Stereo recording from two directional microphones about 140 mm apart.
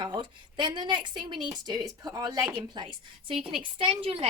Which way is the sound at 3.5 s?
40° right (ahead or behind).